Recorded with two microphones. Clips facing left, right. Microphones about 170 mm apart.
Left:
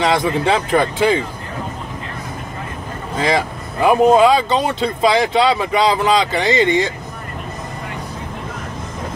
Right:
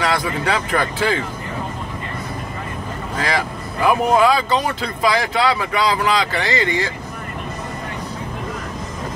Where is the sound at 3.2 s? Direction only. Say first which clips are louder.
Left 5 dB; 20° left (ahead or behind).